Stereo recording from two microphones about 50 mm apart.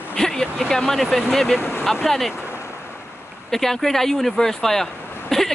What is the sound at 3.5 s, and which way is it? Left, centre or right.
Speech, centre.